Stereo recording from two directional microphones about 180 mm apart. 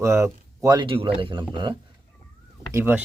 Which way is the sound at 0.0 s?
15° right (ahead or behind).